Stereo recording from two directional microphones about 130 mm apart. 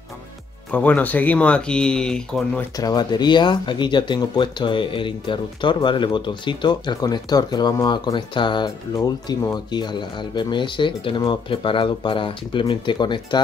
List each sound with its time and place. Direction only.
0.7 s speech: 10° left (ahead or behind)
2.8 s speech: 30° left (ahead or behind)